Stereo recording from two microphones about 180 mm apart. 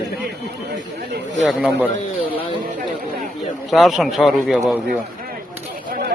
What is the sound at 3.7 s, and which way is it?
Speech, centre (ahead or behind).